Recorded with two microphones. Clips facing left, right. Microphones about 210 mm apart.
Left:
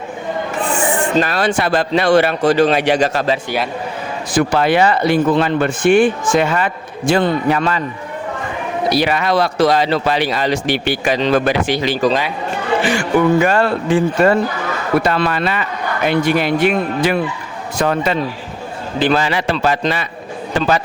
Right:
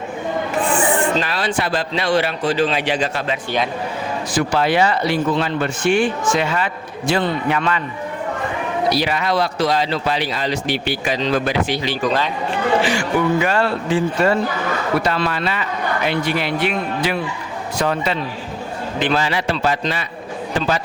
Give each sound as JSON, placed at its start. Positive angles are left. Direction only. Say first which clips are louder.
{"t": 1.2, "sound": "speech", "louder": "left 5 dB", "side_deg": 45}
{"t": 1.5, "sound": "a man's voice", "louder": "left 5 dB", "side_deg": 60}
{"t": 4.3, "sound": "speech", "louder": "left 4 dB", "side_deg": 55}
{"t": 8.9, "sound": "speech", "louder": "left 5 dB", "side_deg": 60}
{"t": 12.0, "sound": "a man's voice", "louder": "left 4 dB", "side_deg": 40}
{"t": 12.8, "sound": "a man's voice", "louder": "left 4 dB", "side_deg": 55}